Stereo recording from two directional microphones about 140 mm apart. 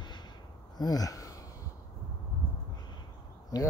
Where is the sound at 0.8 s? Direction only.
25° left (ahead or behind).